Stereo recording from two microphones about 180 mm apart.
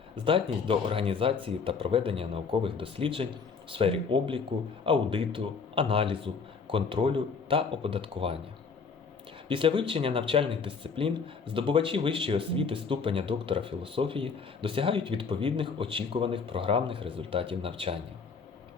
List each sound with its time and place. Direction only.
0.3 s speech: 30° right (ahead or behind)
9.5 s speech: 30° right (ahead or behind)